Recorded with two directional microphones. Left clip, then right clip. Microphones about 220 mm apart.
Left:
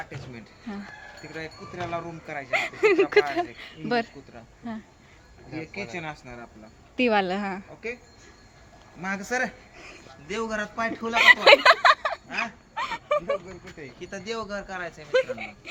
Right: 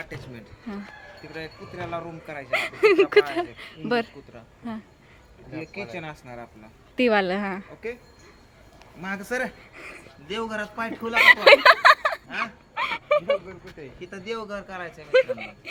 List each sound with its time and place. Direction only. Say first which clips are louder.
1.3 s speech: even; centre (ahead or behind)
5.5 s speech: even; centre (ahead or behind)
9.0 s speech: left 1 dB; centre (ahead or behind)
9.7 s speech: right 4 dB; 20° right (ahead or behind)
10.2 s speech: even; centre (ahead or behind)
11.1 s speech: right 1 dB; 10° right (ahead or behind)
12.7 s a sound: right 4 dB; 5° right (ahead or behind)
13.7 s speech: even; 5° left (ahead or behind)
14.0 s speech: right 1 dB; 25° left (ahead or behind)
14.3 s speech: left 2 dB; 5° left (ahead or behind)
15.1 s speech: right 4 dB; 5° right (ahead or behind)